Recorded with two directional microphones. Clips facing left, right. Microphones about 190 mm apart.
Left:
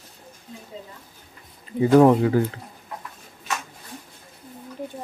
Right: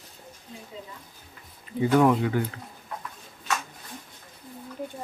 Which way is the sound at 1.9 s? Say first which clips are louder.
Left 6 dB; 35° left (ahead or behind).